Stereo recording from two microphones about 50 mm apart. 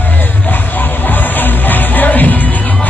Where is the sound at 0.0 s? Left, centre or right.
Left.